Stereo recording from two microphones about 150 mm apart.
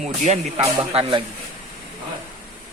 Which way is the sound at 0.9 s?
35° right (ahead or behind).